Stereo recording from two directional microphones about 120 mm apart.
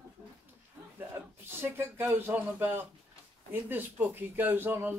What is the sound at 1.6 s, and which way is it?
Speech, 15° right (ahead or behind).